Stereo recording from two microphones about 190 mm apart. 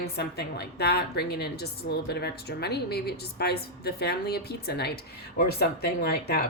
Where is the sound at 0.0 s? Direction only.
60° left (ahead or behind).